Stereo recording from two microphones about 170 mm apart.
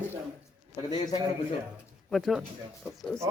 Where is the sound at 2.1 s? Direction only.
Centre (ahead or behind).